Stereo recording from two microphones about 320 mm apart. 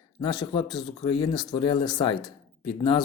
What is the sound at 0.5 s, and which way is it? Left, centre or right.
Speech, centre.